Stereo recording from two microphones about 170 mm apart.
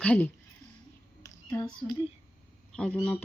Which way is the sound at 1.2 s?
20° left (ahead or behind).